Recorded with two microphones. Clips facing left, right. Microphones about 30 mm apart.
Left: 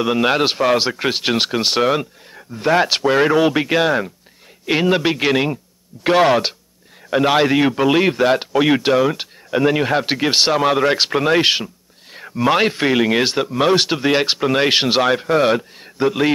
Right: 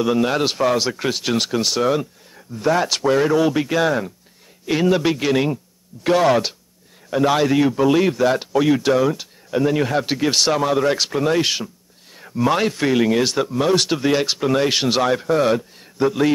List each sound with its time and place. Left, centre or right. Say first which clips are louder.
0.2 s a man's voice: left 2 dB; left